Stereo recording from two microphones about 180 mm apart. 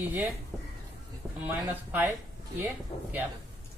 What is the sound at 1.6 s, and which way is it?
Speech, 10° right (ahead or behind).